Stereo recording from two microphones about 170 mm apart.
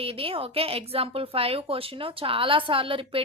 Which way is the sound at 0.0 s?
35° right (ahead or behind).